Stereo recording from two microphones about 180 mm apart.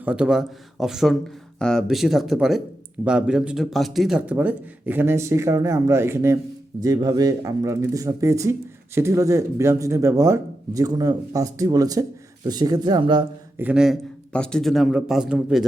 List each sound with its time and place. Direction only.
0.0 s speech: 5° right (ahead or behind); by 13.2 s 25° right (ahead or behind)
13.6 s speech: 5° right (ahead or behind)